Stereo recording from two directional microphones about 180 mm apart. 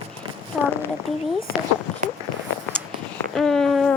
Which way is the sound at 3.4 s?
5° left (ahead or behind).